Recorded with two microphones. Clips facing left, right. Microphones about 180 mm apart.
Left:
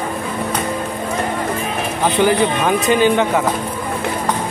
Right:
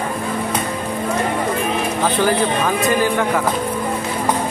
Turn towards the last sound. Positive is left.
turn(degrees=20)  # may be behind; listen again after turning